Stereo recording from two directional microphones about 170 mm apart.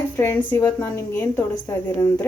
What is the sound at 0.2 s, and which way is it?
A woman's voice, 15° left (ahead or behind).